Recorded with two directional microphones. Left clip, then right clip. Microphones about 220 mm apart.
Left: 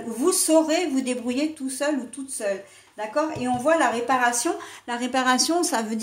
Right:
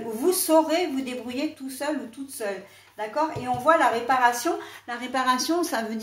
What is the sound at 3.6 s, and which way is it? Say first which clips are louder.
A woman's voice: right 1 dB; 45° left (ahead or behind).